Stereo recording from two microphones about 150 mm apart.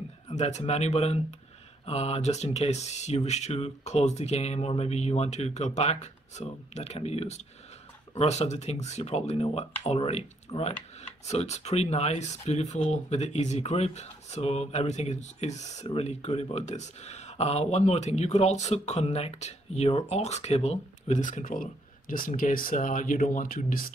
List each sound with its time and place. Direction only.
0.3 s speech: 50° left (ahead or behind); by 23.9 s 70° left (ahead or behind)